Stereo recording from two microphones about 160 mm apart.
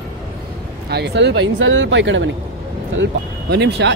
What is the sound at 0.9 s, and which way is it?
Speech, 90° right.